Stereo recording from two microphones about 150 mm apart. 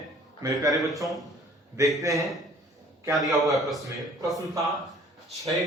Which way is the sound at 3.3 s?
Centre (ahead or behind).